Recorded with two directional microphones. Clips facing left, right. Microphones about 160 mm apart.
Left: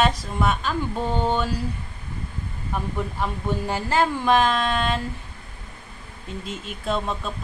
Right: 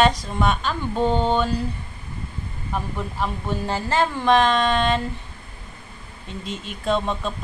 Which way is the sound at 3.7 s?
10° left (ahead or behind).